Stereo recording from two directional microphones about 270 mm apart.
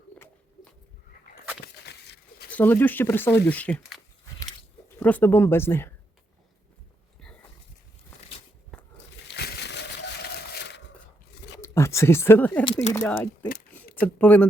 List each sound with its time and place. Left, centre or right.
1.6 s a sound: left
2.5 s speech: centre
9.2 s a sound: left
11.6 s speech: centre
12.6 s speech: centre
12.9 s speech: centre